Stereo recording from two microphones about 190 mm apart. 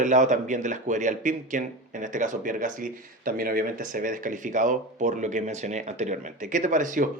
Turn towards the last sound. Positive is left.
turn(degrees=-45)  # may be behind; listen again after turning